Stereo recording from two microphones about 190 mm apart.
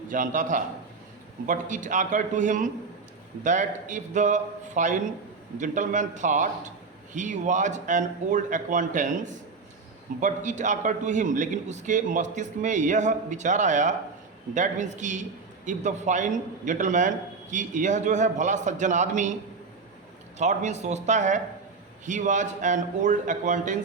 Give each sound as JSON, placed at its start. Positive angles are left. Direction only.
{"t": 0.1, "sound": "a man's voice", "side_deg": -45}
{"t": 20.4, "sound": "a man's voice", "side_deg": -40}